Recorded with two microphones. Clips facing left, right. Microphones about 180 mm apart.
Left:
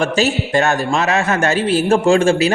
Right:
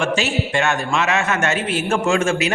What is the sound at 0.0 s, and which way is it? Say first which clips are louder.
A man's voice: left 4 dB; 40° left (ahead or behind).